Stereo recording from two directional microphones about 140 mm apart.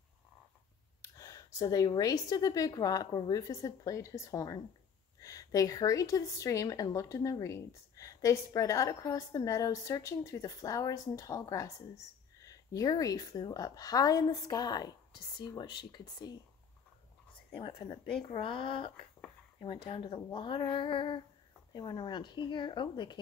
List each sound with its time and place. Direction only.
1.0 s a woman's voice: 25° left (ahead or behind)
17.6 s speech: 35° left (ahead or behind)